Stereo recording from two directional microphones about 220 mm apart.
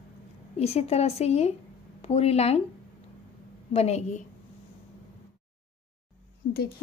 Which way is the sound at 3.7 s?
30° left (ahead or behind).